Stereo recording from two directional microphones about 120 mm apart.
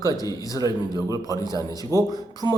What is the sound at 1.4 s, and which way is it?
Speech, 30° left (ahead or behind).